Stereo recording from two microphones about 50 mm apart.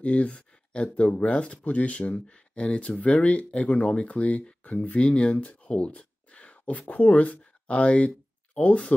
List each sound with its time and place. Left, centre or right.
0.0 s speech: left